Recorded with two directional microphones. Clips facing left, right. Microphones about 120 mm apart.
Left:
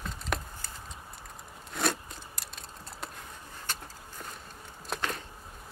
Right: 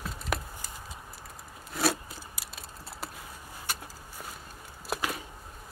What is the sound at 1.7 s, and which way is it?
Wood, 5° right (ahead or behind).